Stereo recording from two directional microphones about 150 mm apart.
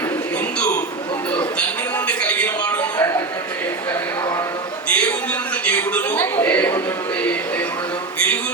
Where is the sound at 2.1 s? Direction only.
10° left (ahead or behind).